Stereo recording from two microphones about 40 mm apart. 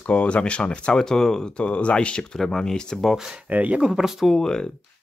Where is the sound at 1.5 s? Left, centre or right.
Left.